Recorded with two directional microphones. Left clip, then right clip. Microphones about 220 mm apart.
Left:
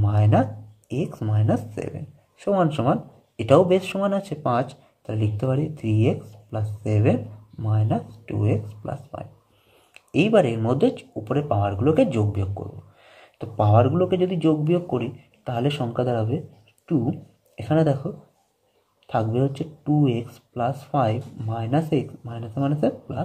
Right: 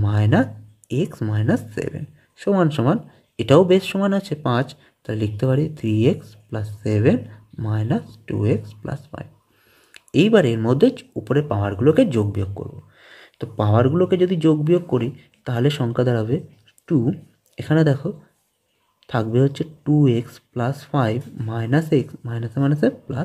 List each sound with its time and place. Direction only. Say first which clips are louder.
0.0 s speech: right 1 dB; 50° right (ahead or behind)